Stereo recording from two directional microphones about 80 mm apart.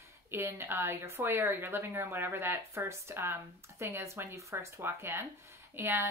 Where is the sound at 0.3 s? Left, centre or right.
Right.